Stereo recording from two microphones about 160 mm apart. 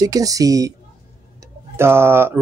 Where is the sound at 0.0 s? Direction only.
20° right (ahead or behind).